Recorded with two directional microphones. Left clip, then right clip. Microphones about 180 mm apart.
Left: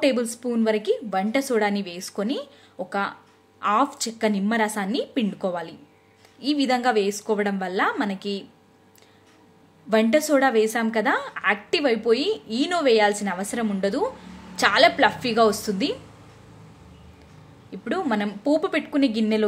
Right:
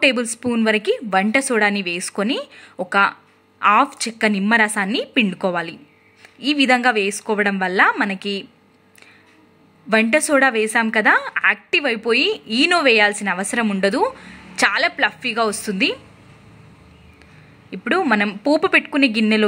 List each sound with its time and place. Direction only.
0.0 s a woman's voice: 20° right (ahead or behind)
9.8 s a woman's voice: 15° right (ahead or behind)
17.6 s a woman's voice: 15° right (ahead or behind)